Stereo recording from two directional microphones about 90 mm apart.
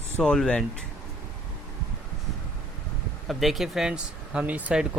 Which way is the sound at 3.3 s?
Centre (ahead or behind).